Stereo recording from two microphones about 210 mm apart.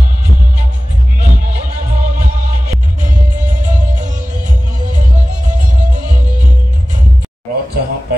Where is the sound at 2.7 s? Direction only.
40° right (ahead or behind).